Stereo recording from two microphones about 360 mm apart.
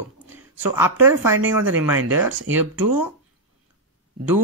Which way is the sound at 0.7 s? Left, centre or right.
Centre.